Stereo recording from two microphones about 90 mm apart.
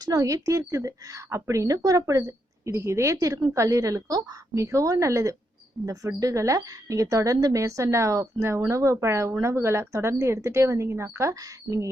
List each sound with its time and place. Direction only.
0.0 s a woman's voice: 40° right (ahead or behind)